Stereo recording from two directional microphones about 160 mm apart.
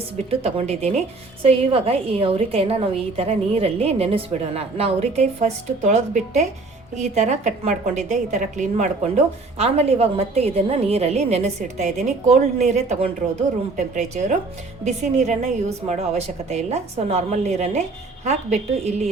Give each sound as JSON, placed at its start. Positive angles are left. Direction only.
{"t": 0.3, "sound": "a woman's voice", "side_deg": -40}